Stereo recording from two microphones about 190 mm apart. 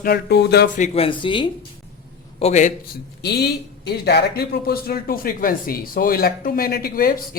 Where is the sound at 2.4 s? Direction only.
35° left (ahead or behind).